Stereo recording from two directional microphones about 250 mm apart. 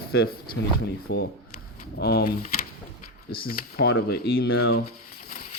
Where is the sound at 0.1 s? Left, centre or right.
Left.